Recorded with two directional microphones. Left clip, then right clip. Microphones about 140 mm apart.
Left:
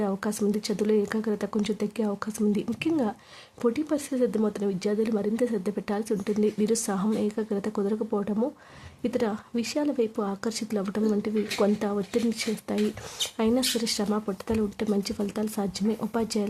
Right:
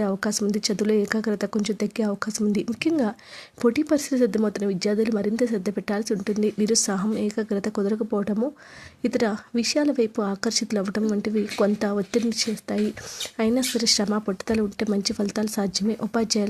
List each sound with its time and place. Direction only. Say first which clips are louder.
0.0 s speech: right 3 dB; 20° right (ahead or behind)